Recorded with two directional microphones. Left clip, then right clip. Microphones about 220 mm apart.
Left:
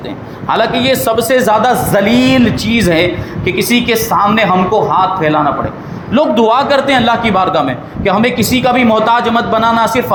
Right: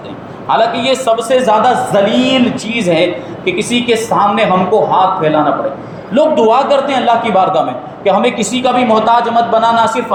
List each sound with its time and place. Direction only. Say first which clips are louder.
0.4 s a man's voice: even; 45° left (ahead or behind)
6.1 s a man's voice: right 1 dB; 40° left (ahead or behind)